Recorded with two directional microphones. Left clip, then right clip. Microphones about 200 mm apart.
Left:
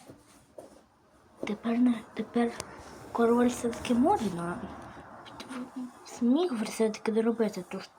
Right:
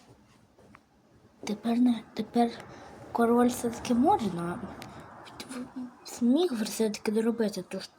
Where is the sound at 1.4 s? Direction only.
25° right (ahead or behind).